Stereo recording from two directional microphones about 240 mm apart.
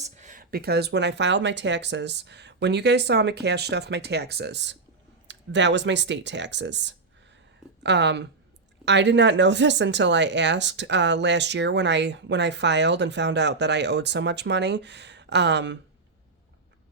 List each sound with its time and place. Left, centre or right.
0.0 s speech: right